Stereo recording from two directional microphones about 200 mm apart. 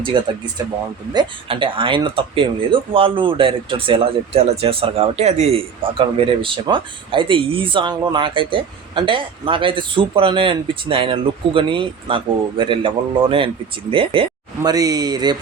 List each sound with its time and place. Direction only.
0.1 s speech: 20° right (ahead or behind)